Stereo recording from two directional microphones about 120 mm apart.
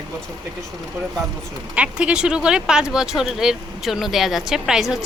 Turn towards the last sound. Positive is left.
turn(degrees=-5)  # may be behind; listen again after turning